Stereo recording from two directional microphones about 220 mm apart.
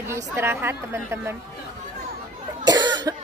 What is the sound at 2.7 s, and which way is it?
Cough, 20° right (ahead or behind).